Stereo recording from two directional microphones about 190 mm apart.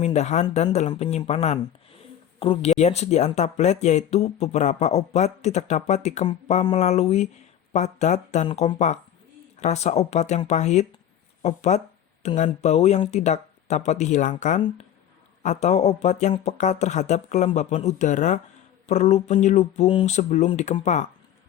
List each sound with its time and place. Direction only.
0.0 s speech: 35° left (ahead or behind)